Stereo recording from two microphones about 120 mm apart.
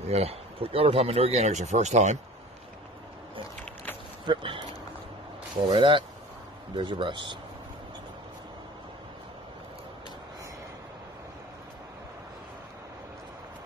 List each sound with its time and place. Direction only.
0.0 s speech: 60° right (ahead or behind)
4.3 s speech: 45° right (ahead or behind)
5.7 s speech: 45° right (ahead or behind)